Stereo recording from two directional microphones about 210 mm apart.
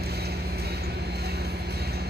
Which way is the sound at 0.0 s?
50° right (ahead or behind).